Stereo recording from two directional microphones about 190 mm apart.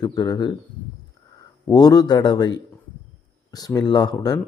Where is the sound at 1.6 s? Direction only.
20° left (ahead or behind).